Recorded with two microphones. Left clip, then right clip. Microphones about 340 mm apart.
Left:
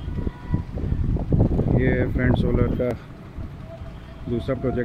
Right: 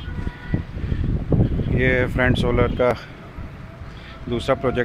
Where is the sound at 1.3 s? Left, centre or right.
Right.